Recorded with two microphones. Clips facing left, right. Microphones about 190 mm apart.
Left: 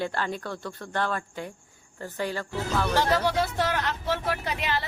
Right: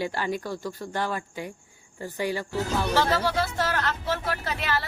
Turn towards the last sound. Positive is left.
turn(degrees=20)  # may be behind; listen again after turning